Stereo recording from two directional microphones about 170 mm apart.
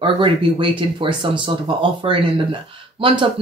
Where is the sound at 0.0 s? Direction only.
30° right (ahead or behind).